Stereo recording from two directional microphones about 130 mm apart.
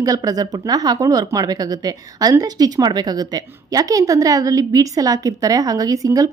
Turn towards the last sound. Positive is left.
turn(degrees=-25)  # may be behind; listen again after turning